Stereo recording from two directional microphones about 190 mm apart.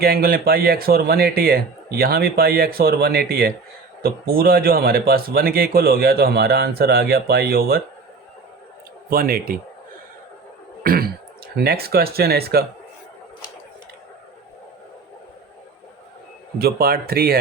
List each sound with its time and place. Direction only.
0.0 s a man's voice: 50° right (ahead or behind)
9.0 s a man's voice: 50° right (ahead or behind)
10.8 s throat clearing: 50° right (ahead or behind)
11.5 s speech: 55° right (ahead or behind)
16.6 s a man's voice: 55° right (ahead or behind)